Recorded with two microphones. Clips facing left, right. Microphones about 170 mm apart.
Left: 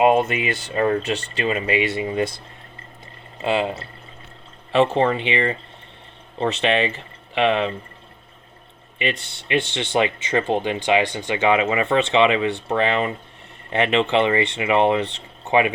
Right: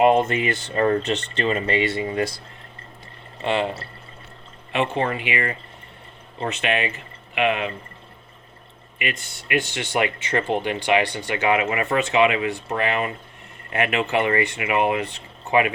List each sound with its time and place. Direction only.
0.1 s speech: 10° left (ahead or behind)
4.7 s speech: 35° left (ahead or behind)
9.0 s speech: 30° left (ahead or behind)